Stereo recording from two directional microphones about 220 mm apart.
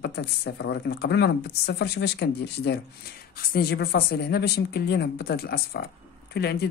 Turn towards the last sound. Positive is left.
turn(degrees=45)  # may be behind; listen again after turning